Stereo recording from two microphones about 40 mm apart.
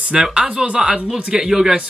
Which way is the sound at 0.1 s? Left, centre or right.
Centre.